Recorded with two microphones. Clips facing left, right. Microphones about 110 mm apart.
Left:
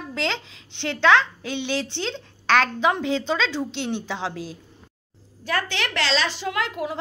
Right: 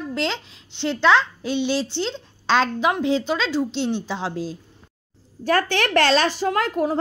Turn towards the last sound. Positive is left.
turn(degrees=-45)  # may be behind; listen again after turning